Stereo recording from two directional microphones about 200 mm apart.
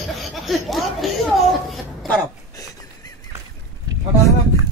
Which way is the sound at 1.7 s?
10° left (ahead or behind).